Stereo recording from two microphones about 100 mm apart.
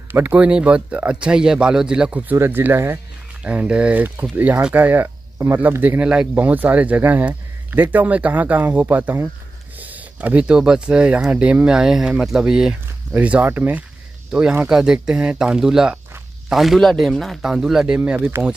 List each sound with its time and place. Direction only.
0.1 s speech: 15° right (ahead or behind)
3.4 s speech: 10° right (ahead or behind)
14.7 s speech: 5° right (ahead or behind)